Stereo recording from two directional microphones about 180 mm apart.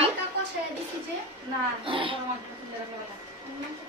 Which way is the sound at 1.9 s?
30° right (ahead or behind).